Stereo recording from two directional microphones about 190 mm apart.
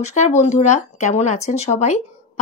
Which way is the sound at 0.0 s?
35° left (ahead or behind).